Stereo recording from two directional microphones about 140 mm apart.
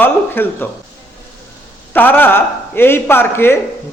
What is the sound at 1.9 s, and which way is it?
A man's voice, 15° left (ahead or behind).